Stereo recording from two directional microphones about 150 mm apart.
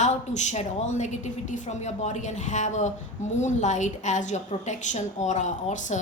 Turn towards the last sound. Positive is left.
turn(degrees=55)  # may be behind; listen again after turning